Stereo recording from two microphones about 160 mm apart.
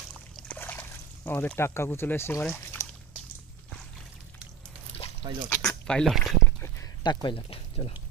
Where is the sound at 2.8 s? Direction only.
20° left (ahead or behind).